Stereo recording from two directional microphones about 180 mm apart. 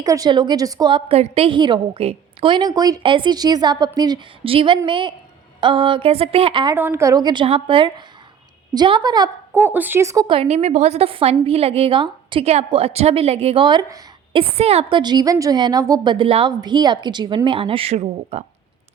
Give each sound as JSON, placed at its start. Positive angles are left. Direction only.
{"t": 0.0, "sound": "a woman's voice", "side_deg": -20}
{"t": 6.7, "sound": "a woman's voice", "side_deg": -10}
{"t": 9.5, "sound": "speech", "side_deg": -10}
{"t": 10.2, "sound": "a woman's voice", "side_deg": -30}